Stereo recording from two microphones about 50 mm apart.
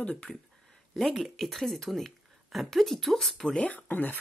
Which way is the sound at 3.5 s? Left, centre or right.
Left.